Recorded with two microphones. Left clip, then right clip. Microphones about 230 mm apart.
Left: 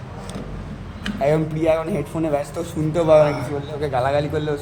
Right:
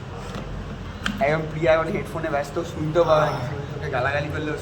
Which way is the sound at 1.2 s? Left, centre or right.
Left.